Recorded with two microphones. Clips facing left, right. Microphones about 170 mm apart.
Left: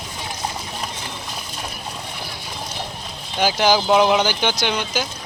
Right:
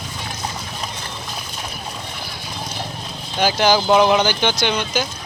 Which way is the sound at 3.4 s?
10° left (ahead or behind).